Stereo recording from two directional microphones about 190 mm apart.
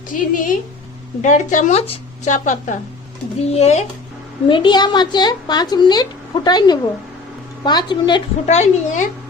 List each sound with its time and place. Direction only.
0.1 s a woman's voice: 45° left (ahead or behind)
4.4 s a woman's voice: 25° left (ahead or behind)
8.4 s a woman's voice: 35° left (ahead or behind)